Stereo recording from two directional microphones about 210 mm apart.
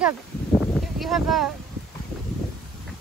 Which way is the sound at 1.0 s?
Centre (ahead or behind).